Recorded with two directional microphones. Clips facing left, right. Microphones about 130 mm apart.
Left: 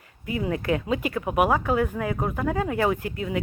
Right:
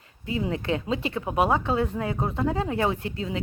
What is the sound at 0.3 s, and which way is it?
A woman's voice, 25° right (ahead or behind).